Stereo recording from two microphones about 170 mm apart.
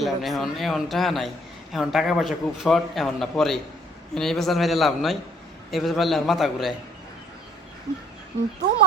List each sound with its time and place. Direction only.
0.0 s a man's voice: centre (ahead or behind)